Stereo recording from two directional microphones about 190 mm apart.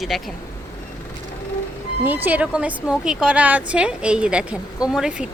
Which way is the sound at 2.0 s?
10° right (ahead or behind).